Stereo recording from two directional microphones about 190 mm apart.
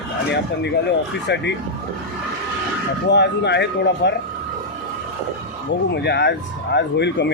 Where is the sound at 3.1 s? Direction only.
65° left (ahead or behind).